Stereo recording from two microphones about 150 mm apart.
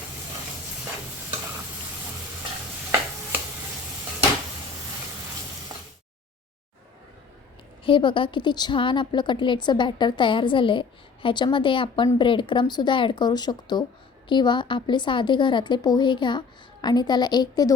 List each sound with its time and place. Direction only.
7.9 s a woman's voice: 35° left (ahead or behind)